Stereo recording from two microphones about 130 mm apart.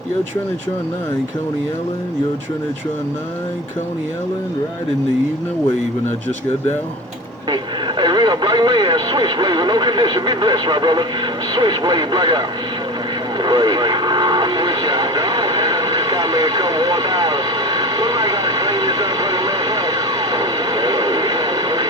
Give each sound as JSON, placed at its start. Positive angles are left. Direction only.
{"t": 7.5, "sound": "radio", "side_deg": -35}
{"t": 11.5, "sound": "speech", "side_deg": -35}
{"t": 13.4, "sound": "radio", "side_deg": -35}